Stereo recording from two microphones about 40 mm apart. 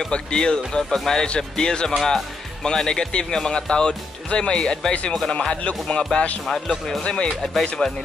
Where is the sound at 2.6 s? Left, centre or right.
Centre.